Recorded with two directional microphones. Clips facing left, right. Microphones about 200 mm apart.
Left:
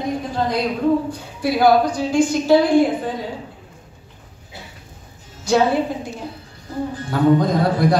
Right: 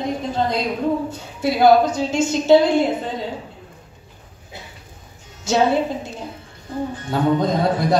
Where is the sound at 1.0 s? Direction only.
25° right (ahead or behind).